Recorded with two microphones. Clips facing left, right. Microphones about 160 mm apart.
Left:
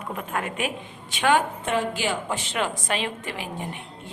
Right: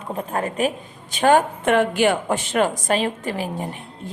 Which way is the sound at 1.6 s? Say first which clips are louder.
Right 8 dB; 65° right (ahead or behind).